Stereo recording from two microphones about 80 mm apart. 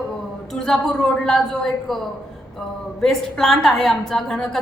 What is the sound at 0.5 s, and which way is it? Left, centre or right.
A woman's voice, centre.